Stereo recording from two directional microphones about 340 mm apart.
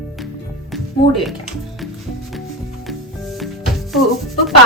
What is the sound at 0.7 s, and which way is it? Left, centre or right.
Music, centre.